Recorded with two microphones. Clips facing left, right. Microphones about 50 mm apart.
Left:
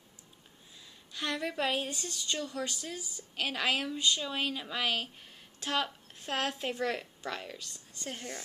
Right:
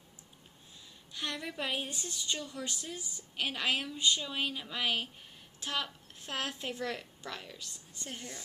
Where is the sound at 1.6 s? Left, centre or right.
Centre.